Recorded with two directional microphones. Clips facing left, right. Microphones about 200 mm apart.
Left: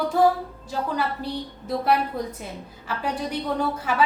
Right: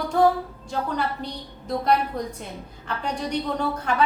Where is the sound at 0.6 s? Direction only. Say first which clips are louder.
Left 1 dB; 5° left (ahead or behind).